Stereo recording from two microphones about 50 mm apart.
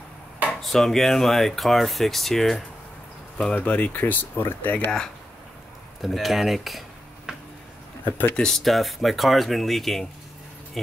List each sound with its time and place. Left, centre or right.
0.6 s speech: centre
3.5 s speech: left
6.0 s speech: centre
7.3 s a sound: centre
8.0 s speech: left
8.4 s speech: centre